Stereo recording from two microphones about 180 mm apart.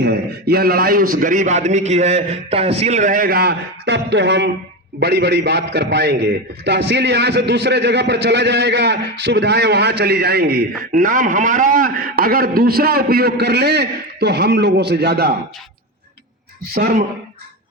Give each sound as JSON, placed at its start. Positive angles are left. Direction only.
{"t": 0.0, "sound": "a man's voice", "side_deg": -65}